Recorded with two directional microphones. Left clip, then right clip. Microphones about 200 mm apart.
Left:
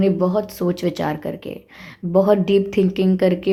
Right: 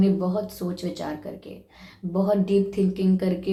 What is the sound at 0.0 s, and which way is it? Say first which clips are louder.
Speech: left 6 dB; 45° left (ahead or behind).